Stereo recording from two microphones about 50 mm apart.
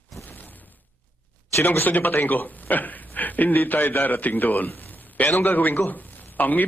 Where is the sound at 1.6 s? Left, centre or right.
Left.